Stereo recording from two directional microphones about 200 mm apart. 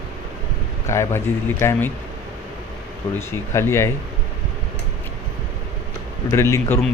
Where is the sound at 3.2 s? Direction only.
15° left (ahead or behind).